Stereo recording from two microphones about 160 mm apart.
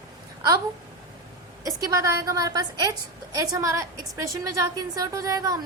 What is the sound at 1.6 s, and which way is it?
A woman's voice, 20° right (ahead or behind).